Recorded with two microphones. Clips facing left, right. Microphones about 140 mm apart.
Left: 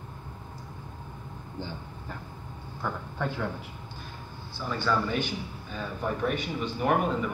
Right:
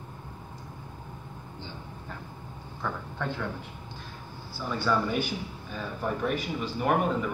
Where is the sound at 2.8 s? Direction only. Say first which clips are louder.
Left 1 dB; 5° left (ahead or behind).